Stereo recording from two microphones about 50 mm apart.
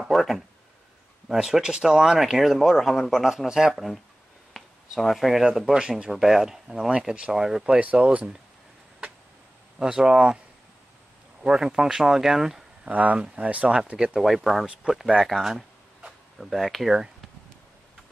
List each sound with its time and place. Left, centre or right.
0.0 s speech: centre
1.3 s speech: centre
4.6 s a sound: centre
5.4 s speech: centre
7.6 s speech: right
9.8 s speech: centre
11.4 s speech: centre
12.8 s speech: right
14.2 s speech: centre